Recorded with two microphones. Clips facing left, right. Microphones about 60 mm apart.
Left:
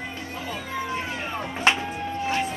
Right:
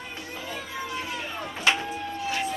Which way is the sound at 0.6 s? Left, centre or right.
Left.